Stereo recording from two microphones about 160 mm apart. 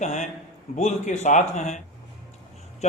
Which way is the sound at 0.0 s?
50° left (ahead or behind).